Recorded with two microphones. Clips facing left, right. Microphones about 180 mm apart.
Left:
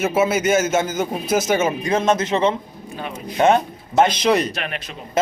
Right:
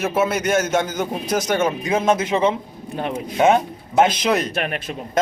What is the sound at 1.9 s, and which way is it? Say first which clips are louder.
Speech: even; 10° right (ahead or behind).